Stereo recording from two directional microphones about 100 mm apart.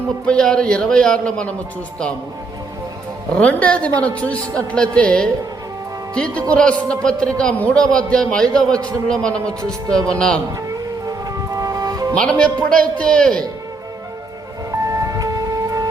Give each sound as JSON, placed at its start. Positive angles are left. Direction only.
{"t": 0.3, "sound": "a man's voice", "side_deg": 10}
{"t": 3.3, "sound": "a man's voice", "side_deg": 10}
{"t": 9.4, "sound": "speech", "side_deg": -35}
{"t": 10.1, "sound": "a man's voice", "side_deg": 10}
{"t": 11.0, "sound": "music", "side_deg": -35}
{"t": 12.1, "sound": "a man's voice", "side_deg": 10}
{"t": 14.7, "sound": "music", "side_deg": -35}